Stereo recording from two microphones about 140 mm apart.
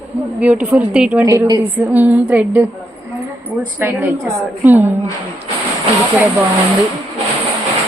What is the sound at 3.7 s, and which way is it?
A woman's voice, 15° right (ahead or behind).